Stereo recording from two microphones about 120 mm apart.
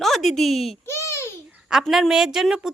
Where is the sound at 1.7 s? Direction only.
5° right (ahead or behind).